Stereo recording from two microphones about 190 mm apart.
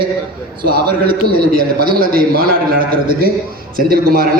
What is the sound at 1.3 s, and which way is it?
A man's voice, 50° right (ahead or behind).